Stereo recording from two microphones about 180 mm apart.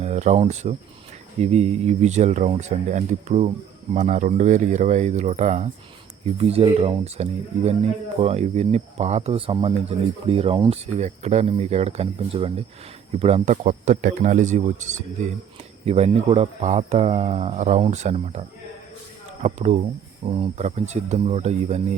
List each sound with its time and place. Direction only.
0.0 s speech: 40° right (ahead or behind)